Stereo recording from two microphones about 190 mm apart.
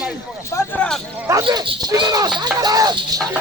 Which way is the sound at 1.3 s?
20° right (ahead or behind).